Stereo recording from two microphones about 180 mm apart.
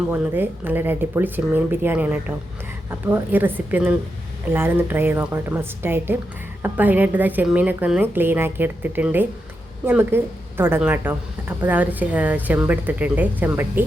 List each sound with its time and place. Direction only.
0.1 s speech: 10° right (ahead or behind)